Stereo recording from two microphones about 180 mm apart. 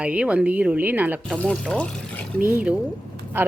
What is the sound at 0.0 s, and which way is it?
Speech, 5° right (ahead or behind).